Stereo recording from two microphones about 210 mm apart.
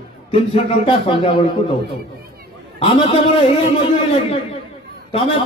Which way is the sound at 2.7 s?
25° left (ahead or behind).